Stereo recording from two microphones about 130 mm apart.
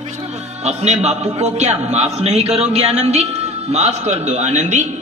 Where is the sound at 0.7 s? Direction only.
60° right (ahead or behind).